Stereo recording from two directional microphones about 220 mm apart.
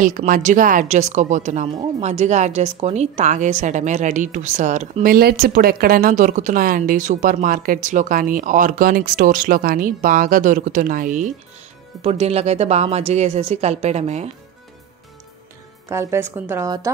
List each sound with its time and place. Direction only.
0.0 s a woman's voice: 35° right (ahead or behind)
15.9 s a woman's voice: 10° right (ahead or behind)